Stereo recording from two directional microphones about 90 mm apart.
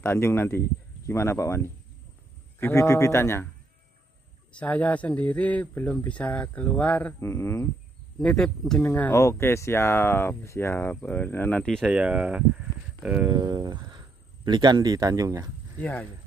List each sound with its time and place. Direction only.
0.0 s speech: 25° left (ahead or behind)
4.6 s speech: 15° left (ahead or behind)
7.2 s speech: 30° left (ahead or behind)
8.2 s speech: 10° left (ahead or behind)
8.8 s speech: 25° left (ahead or behind)
11.8 s speech: 15° right (ahead or behind)
13.3 s speech: 50° right (ahead or behind)
15.8 s speech: 20° left (ahead or behind)